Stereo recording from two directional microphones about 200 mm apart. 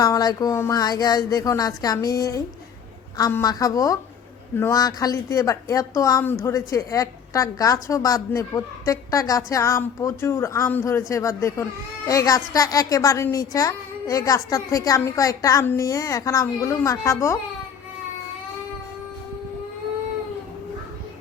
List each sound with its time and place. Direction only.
0.0 s a woman's voice: 20° left (ahead or behind)